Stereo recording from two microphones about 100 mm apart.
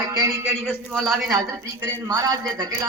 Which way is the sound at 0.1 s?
35° right (ahead or behind).